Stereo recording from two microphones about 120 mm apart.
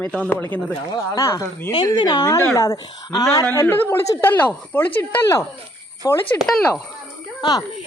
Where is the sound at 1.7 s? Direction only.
35° left (ahead or behind).